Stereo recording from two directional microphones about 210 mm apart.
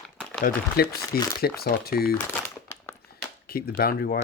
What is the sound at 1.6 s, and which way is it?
Speech, 45° left (ahead or behind).